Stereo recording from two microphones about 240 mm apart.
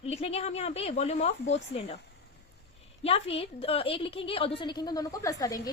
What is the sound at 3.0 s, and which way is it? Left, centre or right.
A woman's voice, left.